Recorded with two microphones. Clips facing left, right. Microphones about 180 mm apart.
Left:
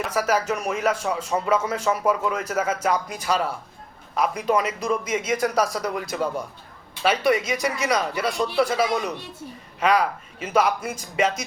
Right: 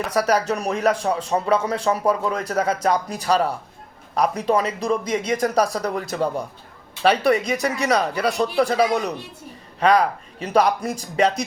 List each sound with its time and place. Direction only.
0.1 s speech: 35° right (ahead or behind)